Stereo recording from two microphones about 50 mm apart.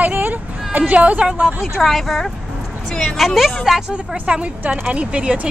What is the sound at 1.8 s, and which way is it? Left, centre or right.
Speech, centre.